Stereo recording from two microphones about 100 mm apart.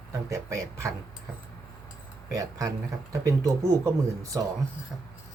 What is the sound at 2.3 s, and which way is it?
Speech, 35° right (ahead or behind).